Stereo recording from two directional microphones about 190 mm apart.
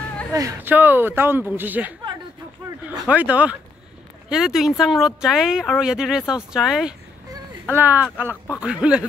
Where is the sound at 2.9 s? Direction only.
5° right (ahead or behind).